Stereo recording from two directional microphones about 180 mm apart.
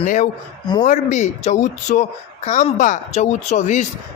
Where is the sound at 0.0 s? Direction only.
45° left (ahead or behind).